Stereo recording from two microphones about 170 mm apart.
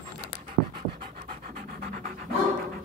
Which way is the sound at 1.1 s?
55° right (ahead or behind).